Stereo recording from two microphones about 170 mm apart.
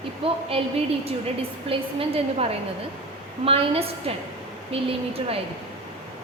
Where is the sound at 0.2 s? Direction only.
30° right (ahead or behind).